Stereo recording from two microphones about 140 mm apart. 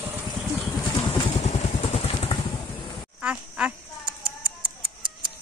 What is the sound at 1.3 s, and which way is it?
Vehicle, 50° left (ahead or behind).